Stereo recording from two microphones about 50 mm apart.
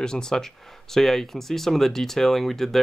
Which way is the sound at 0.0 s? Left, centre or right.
Centre.